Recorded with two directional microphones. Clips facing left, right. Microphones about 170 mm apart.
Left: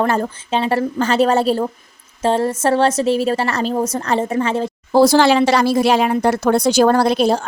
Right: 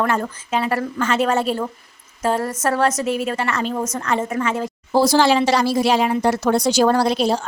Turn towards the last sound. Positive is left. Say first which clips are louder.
# left 3 dB
turn(degrees=55)  # may be behind; listen again after turning